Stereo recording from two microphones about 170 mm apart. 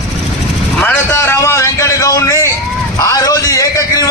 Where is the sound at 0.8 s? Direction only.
15° left (ahead or behind).